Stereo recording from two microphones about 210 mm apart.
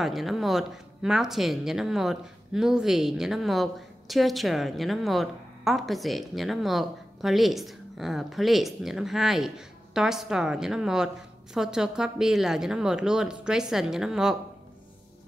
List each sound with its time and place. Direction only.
0.0 s a woman's voice: centre (ahead or behind)